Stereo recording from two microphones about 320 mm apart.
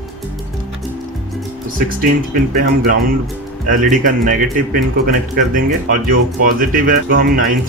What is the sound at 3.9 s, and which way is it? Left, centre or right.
Speech, right.